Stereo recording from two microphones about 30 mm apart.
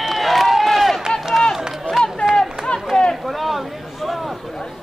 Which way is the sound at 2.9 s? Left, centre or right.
Centre.